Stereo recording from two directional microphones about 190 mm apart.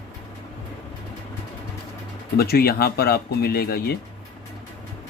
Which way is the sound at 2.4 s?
55° left (ahead or behind).